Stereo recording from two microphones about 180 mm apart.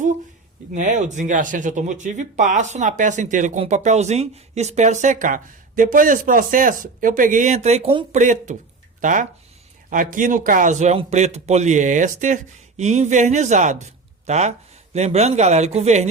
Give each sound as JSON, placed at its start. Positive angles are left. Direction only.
{"t": 0.7, "sound": "speech", "side_deg": -45}
{"t": 8.2, "sound": "a man's voice", "side_deg": -45}